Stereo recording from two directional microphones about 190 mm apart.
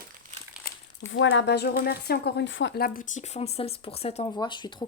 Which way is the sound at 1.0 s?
80° left.